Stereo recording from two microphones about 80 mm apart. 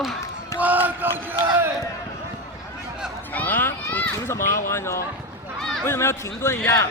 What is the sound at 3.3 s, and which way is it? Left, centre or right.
Children playing, left.